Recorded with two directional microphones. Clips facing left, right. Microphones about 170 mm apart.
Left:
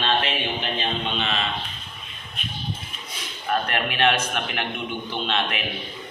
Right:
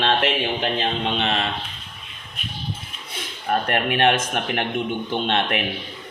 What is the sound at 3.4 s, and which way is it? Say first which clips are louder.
Speech: right 3 dB; 45° right (ahead or behind).